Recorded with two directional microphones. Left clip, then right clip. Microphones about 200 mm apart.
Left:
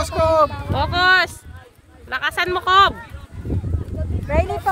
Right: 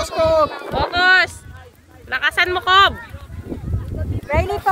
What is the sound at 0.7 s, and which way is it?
Speech, 15° left (ahead or behind).